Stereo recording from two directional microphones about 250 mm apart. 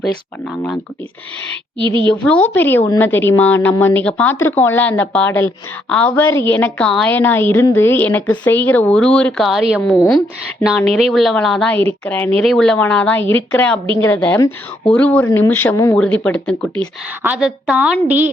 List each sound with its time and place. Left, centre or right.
0.0 s a woman's voice: centre
1.8 s a woman's voice: centre
2.2 s a woman's voice: centre